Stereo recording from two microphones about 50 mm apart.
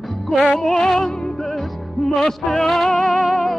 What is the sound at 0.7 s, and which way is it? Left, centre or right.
Music, centre.